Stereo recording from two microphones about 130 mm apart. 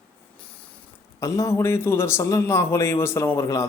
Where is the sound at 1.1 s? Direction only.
25° left (ahead or behind).